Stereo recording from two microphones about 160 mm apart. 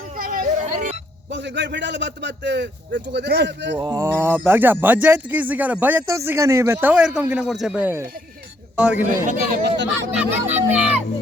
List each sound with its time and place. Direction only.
0.2 s hubbub: 55° right (ahead or behind)
1.3 s a man's voice: 90° right
3.8 s speech: 20° right (ahead or behind)
9.6 s a man's voice: 90° right
10.2 s speech: 10° right (ahead or behind)